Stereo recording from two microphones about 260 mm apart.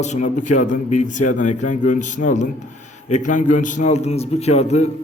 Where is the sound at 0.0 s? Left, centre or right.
Left.